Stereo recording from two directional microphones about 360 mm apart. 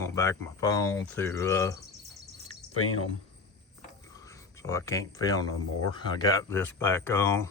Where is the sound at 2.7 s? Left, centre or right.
Left.